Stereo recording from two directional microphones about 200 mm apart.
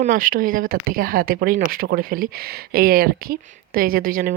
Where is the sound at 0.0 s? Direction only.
45° right (ahead or behind).